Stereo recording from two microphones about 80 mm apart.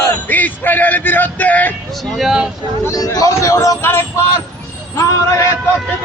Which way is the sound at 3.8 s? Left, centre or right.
Left.